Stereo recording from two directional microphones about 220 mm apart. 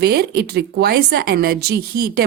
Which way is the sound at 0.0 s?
45° right (ahead or behind).